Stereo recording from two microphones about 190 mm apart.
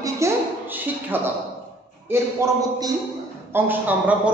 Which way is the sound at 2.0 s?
15° right (ahead or behind).